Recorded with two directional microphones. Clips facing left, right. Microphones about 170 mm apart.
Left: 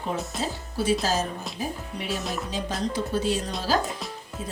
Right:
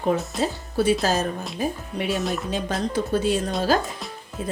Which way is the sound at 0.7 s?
60° right (ahead or behind).